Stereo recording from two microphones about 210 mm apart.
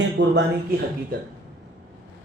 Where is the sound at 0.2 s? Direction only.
45° right (ahead or behind).